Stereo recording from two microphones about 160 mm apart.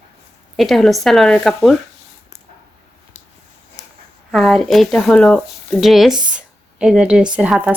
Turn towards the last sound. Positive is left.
turn(degrees=-10)  # may be behind; listen again after turning